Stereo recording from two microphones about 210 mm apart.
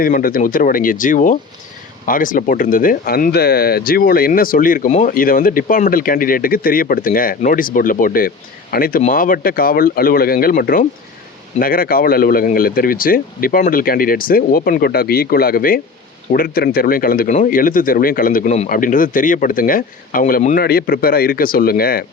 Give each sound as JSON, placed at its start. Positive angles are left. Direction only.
{"t": 0.0, "sound": "speech", "side_deg": 40}